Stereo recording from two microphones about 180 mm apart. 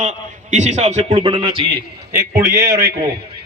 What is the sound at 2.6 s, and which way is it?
Speech, 65° right (ahead or behind).